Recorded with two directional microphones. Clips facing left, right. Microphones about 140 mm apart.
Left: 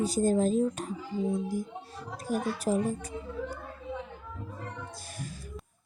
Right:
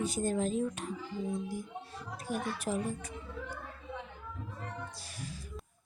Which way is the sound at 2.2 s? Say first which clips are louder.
Left 6 dB; 40° left (ahead or behind).